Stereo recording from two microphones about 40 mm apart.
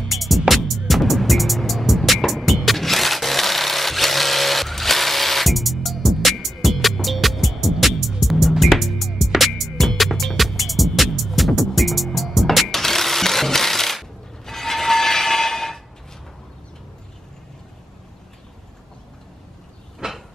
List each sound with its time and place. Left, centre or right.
0.0 s music: centre
20.0 s vehicle: centre